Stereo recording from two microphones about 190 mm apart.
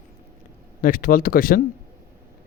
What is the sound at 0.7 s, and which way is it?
Speech, 45° left (ahead or behind).